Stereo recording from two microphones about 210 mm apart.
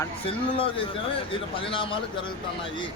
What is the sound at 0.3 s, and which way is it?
A man's voice, 25° left (ahead or behind).